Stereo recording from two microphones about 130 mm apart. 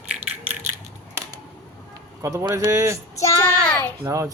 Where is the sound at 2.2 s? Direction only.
25° right (ahead or behind).